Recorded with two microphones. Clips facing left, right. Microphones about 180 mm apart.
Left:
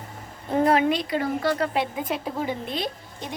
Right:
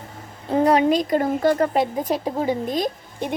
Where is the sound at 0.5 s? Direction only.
35° right (ahead or behind).